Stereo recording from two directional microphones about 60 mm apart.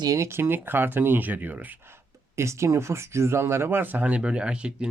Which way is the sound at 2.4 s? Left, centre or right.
Right.